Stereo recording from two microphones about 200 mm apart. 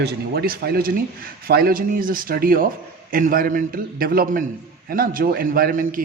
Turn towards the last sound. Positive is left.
turn(degrees=-40)  # may be behind; listen again after turning